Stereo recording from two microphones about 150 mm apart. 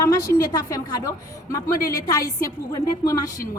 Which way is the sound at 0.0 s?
20° left (ahead or behind).